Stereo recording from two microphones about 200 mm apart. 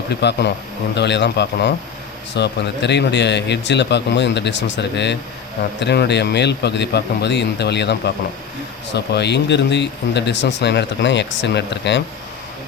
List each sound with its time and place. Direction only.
0.1 s speech: 55° left (ahead or behind)